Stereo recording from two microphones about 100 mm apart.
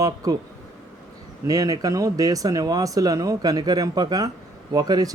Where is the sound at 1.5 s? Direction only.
40° right (ahead or behind).